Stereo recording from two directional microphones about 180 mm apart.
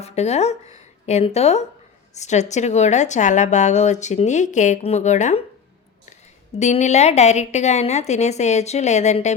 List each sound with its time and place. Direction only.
0.0 s a woman's voice: 35° left (ahead or behind)
6.6 s a woman's voice: 40° left (ahead or behind)